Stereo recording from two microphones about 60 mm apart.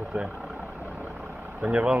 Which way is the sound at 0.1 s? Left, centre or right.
Centre.